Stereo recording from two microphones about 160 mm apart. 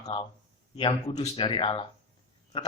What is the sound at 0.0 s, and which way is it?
A man's voice, 35° left (ahead or behind).